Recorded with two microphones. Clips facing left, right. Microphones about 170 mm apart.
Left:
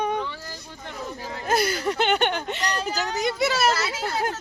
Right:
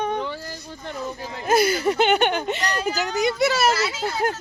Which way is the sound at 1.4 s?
5° right (ahead or behind).